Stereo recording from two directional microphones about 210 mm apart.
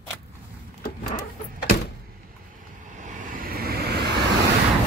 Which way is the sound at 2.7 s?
35° right (ahead or behind).